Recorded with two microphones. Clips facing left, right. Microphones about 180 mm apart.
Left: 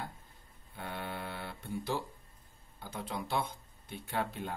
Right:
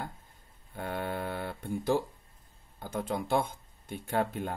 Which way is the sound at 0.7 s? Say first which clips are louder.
Right 6 dB; 45° right (ahead or behind).